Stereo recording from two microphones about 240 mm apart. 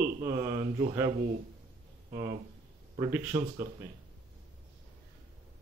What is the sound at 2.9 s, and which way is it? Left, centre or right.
Speech, centre.